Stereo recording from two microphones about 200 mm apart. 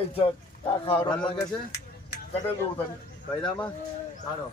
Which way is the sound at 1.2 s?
25° left (ahead or behind).